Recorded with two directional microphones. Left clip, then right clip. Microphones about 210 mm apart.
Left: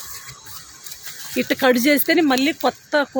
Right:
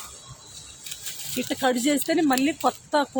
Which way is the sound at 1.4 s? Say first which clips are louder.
Left 7 dB; 45° left (ahead or behind).